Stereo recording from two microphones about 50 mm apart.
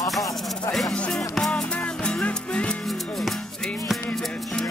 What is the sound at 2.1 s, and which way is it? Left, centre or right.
Music, left.